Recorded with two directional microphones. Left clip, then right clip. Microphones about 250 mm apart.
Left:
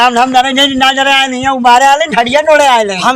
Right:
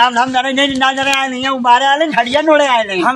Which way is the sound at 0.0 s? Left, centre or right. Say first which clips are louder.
Left 4 dB; left.